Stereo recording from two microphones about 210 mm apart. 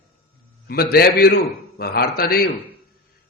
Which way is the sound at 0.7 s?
45° left (ahead or behind).